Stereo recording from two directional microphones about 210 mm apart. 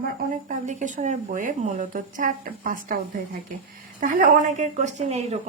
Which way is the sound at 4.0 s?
40° right (ahead or behind).